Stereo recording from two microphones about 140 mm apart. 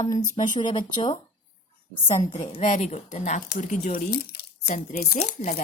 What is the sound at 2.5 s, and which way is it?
Speech, 55° left (ahead or behind).